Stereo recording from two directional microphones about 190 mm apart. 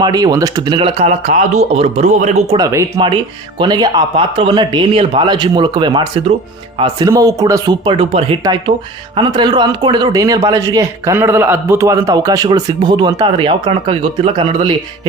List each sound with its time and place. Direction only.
0.0 s a man's voice: 20° right (ahead or behind); by 2.6 s 35° right (ahead or behind)
2.6 s a man's voice: 20° right (ahead or behind)